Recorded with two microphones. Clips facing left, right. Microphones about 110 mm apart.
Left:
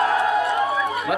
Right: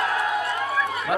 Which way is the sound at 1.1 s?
35° right (ahead or behind).